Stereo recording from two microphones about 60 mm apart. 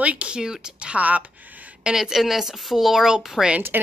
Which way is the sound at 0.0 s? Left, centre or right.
Right.